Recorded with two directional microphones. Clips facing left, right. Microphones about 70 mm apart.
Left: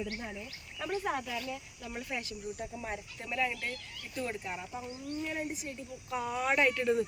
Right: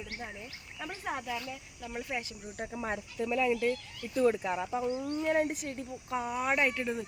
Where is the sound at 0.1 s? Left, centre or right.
Centre.